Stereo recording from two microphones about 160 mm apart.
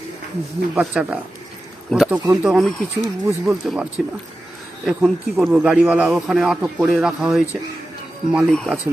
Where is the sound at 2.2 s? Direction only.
10° right (ahead or behind).